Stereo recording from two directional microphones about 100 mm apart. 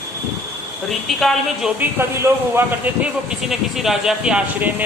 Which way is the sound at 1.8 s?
25° right (ahead or behind).